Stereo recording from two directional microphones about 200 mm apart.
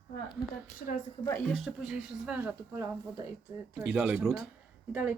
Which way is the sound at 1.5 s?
Centre (ahead or behind).